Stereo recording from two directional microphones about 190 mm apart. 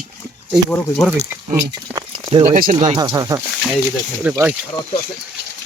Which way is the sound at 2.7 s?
25° right (ahead or behind).